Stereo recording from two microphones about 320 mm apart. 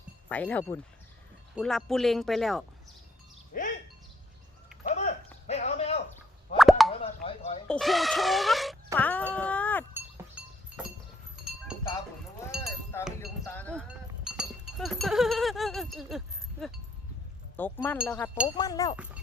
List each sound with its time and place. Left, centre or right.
0.3 s speech: centre
3.5 s music: left
4.8 s a sound: left
6.6 s plop: centre
7.0 s chop: centre
7.7 s a sound: centre
12.5 s chink: centre
13.1 s wind chime: centre
14.3 s sheep: centre
17.6 s speech: centre